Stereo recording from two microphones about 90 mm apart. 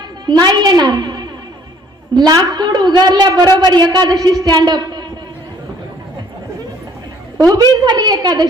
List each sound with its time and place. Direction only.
0.3 s a woman's voice: 50° right (ahead or behind)
7.4 s a woman's voice: 50° right (ahead or behind)